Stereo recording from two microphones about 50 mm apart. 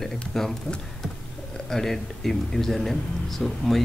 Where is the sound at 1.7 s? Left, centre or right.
Centre.